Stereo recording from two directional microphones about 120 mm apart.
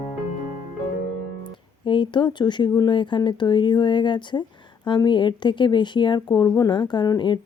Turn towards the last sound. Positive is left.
turn(degrees=35)  # may be behind; listen again after turning